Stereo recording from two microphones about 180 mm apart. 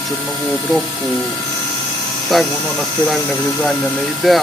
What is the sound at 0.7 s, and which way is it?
Speech, centre (ahead or behind).